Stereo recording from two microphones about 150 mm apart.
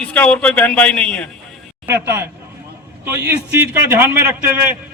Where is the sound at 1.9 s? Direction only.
15° right (ahead or behind).